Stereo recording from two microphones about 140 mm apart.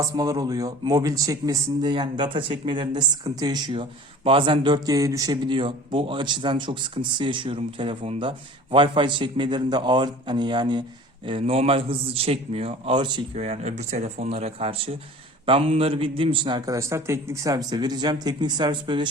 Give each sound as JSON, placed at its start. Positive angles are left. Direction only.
{"t": 0.2, "sound": "a man's voice", "side_deg": -25}
{"t": 13.4, "sound": "a man's voice", "side_deg": -50}